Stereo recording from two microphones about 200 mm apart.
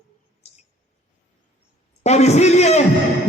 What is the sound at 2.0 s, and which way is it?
Speech, 35° left (ahead or behind).